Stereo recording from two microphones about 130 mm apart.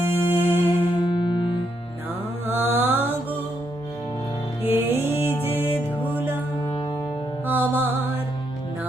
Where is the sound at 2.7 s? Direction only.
15° right (ahead or behind).